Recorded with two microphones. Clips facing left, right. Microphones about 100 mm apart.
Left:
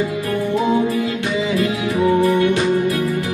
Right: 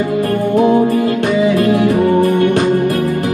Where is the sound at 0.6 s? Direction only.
50° right (ahead or behind).